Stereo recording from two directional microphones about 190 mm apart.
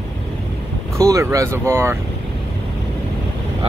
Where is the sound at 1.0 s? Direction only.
15° right (ahead or behind).